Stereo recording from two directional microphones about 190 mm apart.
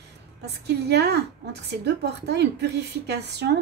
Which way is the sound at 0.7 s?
60° right (ahead or behind).